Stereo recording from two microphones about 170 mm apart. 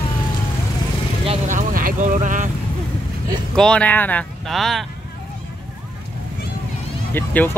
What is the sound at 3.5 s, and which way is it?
Speech, 5° left (ahead or behind).